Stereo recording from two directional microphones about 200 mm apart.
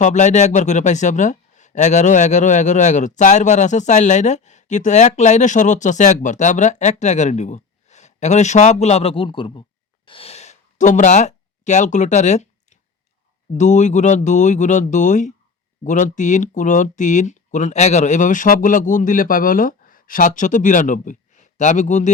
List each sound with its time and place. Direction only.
0.0 s speech: 35° left (ahead or behind)
10.1 s a sound: 30° left (ahead or behind)
13.5 s speech: 35° left (ahead or behind)